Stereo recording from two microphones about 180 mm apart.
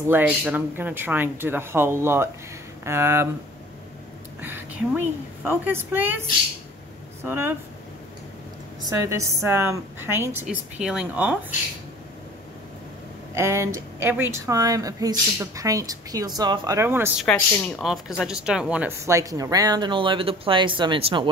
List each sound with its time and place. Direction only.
0.1 s speech: 10° right (ahead or behind)
4.4 s a woman's voice: 10° right (ahead or behind)
7.2 s speech: 10° right (ahead or behind)
8.8 s speech: 15° right (ahead or behind)
13.3 s speech: 15° right (ahead or behind)
17.2 s speech: centre (ahead or behind); by 21.3 s 25° right (ahead or behind)